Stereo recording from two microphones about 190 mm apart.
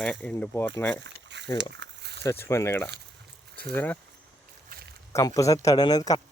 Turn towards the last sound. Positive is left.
turn(degrees=20)  # may be behind; listen again after turning